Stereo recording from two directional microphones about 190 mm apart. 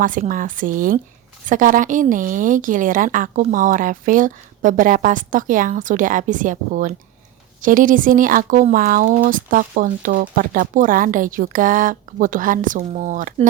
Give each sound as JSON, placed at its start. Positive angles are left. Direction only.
{"t": 0.0, "sound": "a woman's voice", "side_deg": -45}